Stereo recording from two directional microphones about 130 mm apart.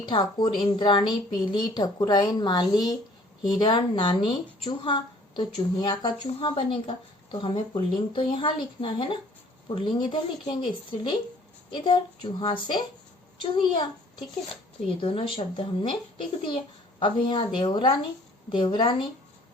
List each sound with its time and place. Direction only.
0.0 s a woman's voice: 40° left (ahead or behind)
17.0 s a woman's voice: 40° left (ahead or behind)